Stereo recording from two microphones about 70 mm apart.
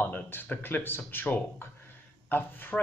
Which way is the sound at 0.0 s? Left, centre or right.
Left.